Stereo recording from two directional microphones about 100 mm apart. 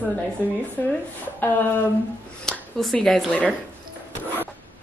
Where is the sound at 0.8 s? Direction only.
20° left (ahead or behind).